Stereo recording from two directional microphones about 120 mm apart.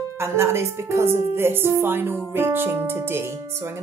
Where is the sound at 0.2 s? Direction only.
20° right (ahead or behind).